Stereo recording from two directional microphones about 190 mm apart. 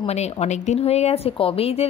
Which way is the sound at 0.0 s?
35° left (ahead or behind).